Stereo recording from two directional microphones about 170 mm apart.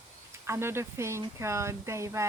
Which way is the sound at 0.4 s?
15° right (ahead or behind).